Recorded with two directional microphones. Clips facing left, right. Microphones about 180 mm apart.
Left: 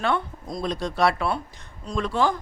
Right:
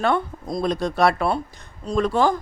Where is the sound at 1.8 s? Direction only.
30° right (ahead or behind).